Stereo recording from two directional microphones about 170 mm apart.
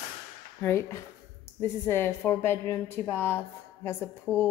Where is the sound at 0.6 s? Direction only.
15° left (ahead or behind).